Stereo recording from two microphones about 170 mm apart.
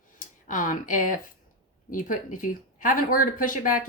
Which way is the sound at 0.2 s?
50° left (ahead or behind).